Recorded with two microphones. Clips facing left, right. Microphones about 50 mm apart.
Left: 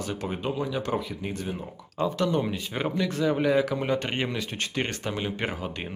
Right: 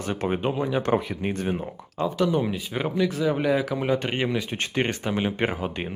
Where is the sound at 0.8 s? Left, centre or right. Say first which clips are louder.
Right 5 dB; right.